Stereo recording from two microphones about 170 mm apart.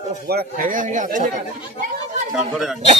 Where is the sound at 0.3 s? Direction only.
60° right (ahead or behind).